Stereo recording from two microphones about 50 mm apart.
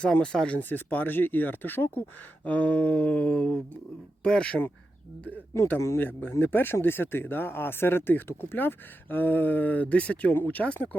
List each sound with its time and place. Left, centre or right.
0.0 s mantra: centre
0.5 s speech: left
2.4 s mantra: left
4.2 s speech: centre
6.0 s speech: left